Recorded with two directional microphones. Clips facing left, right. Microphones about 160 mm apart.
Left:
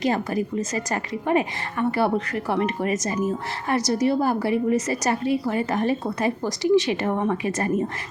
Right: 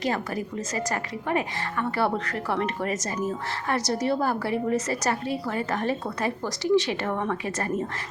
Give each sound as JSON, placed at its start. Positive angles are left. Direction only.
{"t": 0.0, "sound": "a woman's voice", "side_deg": 20}